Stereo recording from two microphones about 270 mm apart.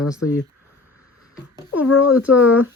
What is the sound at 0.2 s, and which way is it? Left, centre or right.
Speech, left.